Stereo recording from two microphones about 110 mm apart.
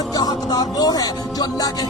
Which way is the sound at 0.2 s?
35° left (ahead or behind).